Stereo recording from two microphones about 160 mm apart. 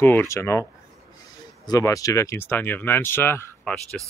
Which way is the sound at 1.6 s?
20° left (ahead or behind).